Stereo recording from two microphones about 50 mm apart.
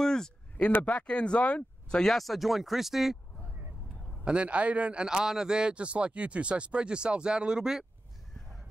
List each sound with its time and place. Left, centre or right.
0.0 s a sound: centre
0.7 s speech: left
0.9 s speech: left
2.0 s speech: centre
4.2 s speech: right
5.0 s speech: centre